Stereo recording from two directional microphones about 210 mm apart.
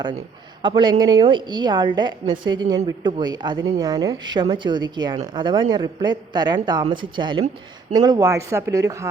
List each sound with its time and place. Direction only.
0.6 s a woman's voice: 20° right (ahead or behind)